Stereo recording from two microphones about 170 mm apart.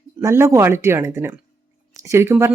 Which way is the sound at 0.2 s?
15° right (ahead or behind).